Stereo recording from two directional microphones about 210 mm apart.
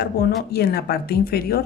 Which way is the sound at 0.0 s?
50° left (ahead or behind).